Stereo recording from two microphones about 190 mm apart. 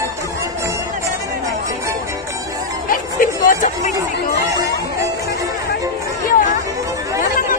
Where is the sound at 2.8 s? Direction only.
45° left (ahead or behind).